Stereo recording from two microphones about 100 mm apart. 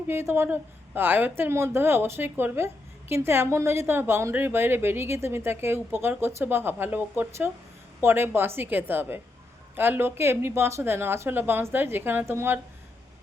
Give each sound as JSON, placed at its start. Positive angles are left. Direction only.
{"t": 0.1, "sound": "a woman's voice", "side_deg": -25}